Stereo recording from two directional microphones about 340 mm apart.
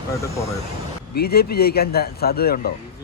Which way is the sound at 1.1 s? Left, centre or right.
Left.